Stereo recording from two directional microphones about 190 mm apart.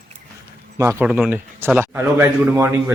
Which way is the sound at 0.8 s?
15° right (ahead or behind).